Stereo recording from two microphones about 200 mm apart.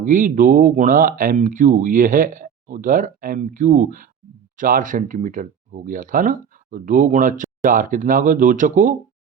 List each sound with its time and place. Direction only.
0.0 s speech: 40° right (ahead or behind)